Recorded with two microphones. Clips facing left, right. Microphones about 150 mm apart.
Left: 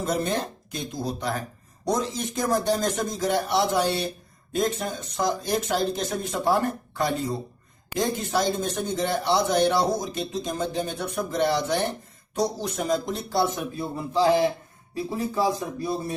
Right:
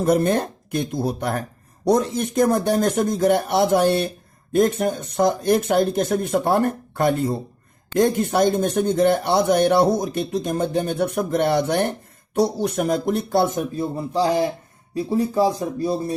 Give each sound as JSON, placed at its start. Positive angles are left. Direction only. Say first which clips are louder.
{"t": 0.0, "sound": "speech", "louder": "right 8 dB", "side_deg": -55}
{"t": 13.7, "sound": "speech", "louder": "even", "side_deg": -35}